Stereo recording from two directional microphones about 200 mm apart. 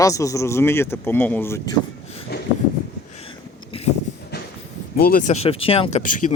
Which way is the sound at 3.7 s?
30° left (ahead or behind).